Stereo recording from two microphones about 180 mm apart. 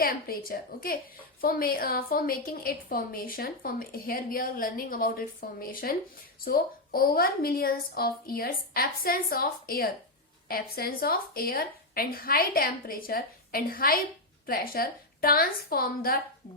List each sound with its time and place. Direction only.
0.0 s a woman's voice: 55° left (ahead or behind)